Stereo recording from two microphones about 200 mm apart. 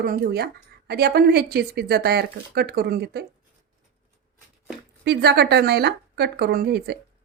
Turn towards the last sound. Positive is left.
turn(degrees=-55)  # may be behind; listen again after turning